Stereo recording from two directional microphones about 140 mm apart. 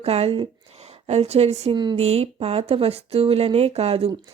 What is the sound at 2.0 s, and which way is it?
Speech, 45° right (ahead or behind).